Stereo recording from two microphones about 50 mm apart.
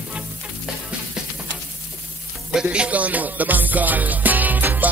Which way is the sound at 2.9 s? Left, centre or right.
Right.